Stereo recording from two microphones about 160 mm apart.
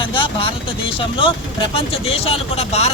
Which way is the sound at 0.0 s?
30° left (ahead or behind).